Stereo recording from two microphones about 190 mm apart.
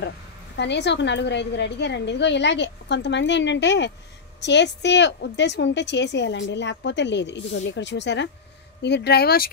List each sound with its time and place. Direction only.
0.6 s a woman's voice: 65° left (ahead or behind)